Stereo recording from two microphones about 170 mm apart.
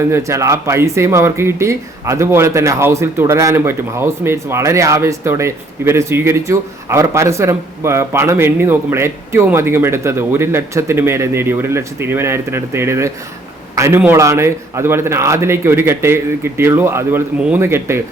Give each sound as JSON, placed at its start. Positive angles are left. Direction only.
{"t": 0.1, "sound": "speech", "side_deg": -15}